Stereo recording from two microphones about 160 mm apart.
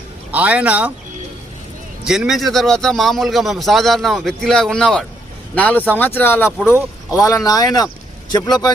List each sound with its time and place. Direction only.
0.3 s speech: 10° right (ahead or behind)
2.0 s a man's voice: centre (ahead or behind); by 8.7 s 25° left (ahead or behind)